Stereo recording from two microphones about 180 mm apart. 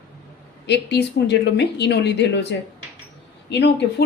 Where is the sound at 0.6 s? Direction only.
70° left (ahead or behind).